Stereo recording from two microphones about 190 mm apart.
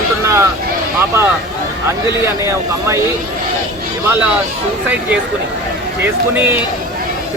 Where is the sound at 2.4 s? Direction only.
15° right (ahead or behind).